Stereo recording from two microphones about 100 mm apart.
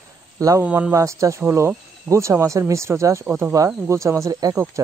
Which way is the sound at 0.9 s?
30° right (ahead or behind).